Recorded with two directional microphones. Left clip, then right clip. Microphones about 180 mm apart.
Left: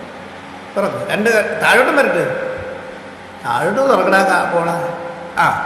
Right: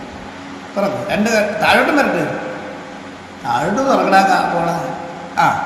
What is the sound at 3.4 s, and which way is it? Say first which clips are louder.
A man's voice: left 2 dB; 35° left (ahead or behind).